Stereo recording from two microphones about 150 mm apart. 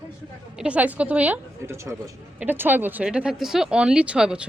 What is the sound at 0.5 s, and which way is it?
A woman's voice, 10° right (ahead or behind).